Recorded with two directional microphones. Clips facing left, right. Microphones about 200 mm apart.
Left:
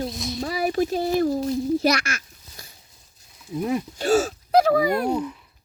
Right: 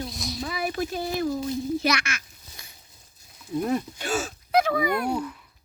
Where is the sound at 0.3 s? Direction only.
40° left (ahead or behind).